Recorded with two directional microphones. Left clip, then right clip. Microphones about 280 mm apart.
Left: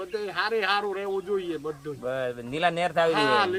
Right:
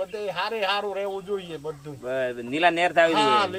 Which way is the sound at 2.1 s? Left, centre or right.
Left.